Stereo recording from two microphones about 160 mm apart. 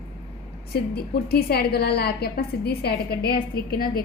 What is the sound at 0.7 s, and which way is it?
A woman's voice, 80° left.